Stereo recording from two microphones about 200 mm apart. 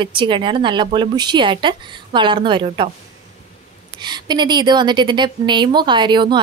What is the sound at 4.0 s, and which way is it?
A woman's voice, 20° right (ahead or behind).